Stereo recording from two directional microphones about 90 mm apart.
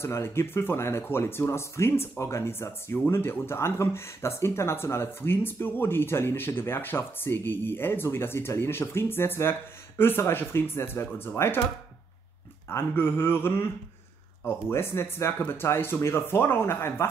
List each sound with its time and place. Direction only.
0.0 s speech: 30° left (ahead or behind)
12.6 s speech: 25° left (ahead or behind)
14.7 s speech: 30° left (ahead or behind)